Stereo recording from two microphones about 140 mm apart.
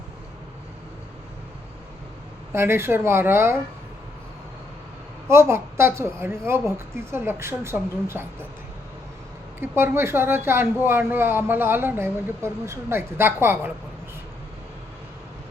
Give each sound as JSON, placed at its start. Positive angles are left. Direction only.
{"t": 2.5, "sound": "speech", "side_deg": -20}
{"t": 5.3, "sound": "speech", "side_deg": -20}
{"t": 9.6, "sound": "speech", "side_deg": -15}